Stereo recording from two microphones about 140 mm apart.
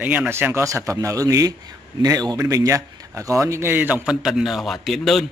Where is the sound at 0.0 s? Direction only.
10° right (ahead or behind).